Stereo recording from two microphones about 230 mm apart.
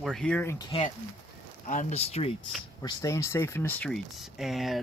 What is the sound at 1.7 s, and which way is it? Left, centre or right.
Speech, left.